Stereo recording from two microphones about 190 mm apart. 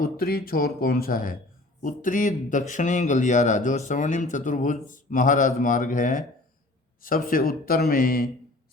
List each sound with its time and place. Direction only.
0.0 s a man's voice: 55° left (ahead or behind)